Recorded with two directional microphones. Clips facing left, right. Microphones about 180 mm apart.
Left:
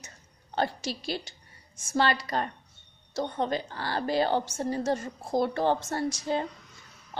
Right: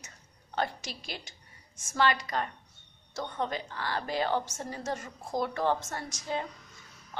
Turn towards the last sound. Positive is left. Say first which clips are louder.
# left 6 dB
turn(degrees=35)  # may be behind; listen again after turning